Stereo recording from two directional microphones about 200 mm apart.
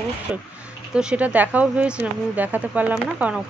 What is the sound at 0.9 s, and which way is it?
Speech, 5° right (ahead or behind).